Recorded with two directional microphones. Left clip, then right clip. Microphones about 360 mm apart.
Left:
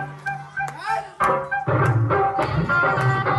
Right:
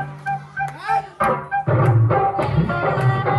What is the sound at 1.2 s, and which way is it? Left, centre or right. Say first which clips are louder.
Music: right 1 dB; centre.